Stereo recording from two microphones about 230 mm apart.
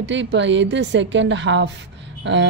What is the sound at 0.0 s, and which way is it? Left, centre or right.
Speech, right.